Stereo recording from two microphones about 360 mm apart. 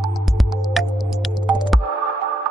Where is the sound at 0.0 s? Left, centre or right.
Centre.